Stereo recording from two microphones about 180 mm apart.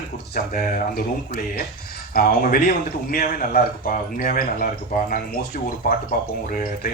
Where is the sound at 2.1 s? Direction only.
50° left (ahead or behind).